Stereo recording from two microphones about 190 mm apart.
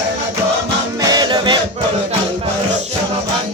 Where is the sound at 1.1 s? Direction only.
25° right (ahead or behind).